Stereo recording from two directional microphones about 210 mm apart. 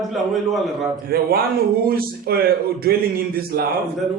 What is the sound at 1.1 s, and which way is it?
A man's voice, 45° right (ahead or behind).